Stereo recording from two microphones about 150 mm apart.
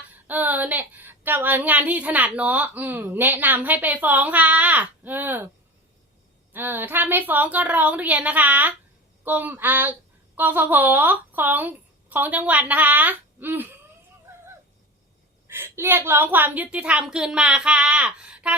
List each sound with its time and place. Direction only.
0.3 s speech: 10° right (ahead or behind)
6.5 s speech: 15° right (ahead or behind)
14.3 s a sound: 15° right (ahead or behind)
15.4 s speech: 15° right (ahead or behind)